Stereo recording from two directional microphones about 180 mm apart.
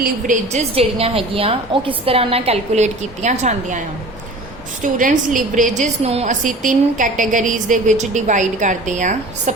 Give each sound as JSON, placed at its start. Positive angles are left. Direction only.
{"t": 0.0, "sound": "a woman's voice", "side_deg": -40}
{"t": 4.8, "sound": "a woman's voice", "side_deg": -45}